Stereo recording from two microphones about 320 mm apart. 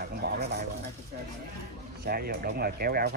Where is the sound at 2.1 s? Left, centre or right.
Right.